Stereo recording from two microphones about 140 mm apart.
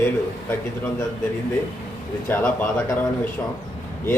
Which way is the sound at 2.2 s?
15° left (ahead or behind).